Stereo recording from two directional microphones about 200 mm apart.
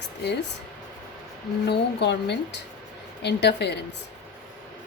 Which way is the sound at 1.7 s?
55° left (ahead or behind).